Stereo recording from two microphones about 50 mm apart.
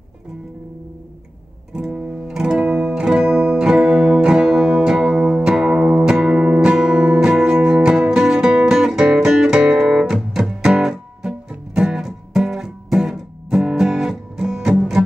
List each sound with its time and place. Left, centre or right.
1.7 s music: centre
2.4 s guitar: centre
6.0 s music: centre